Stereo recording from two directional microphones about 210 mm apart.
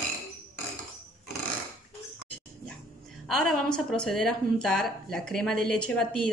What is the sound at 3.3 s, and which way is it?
A woman's voice, centre (ahead or behind).